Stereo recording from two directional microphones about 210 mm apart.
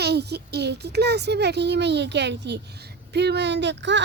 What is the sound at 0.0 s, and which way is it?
Speech, 50° right (ahead or behind).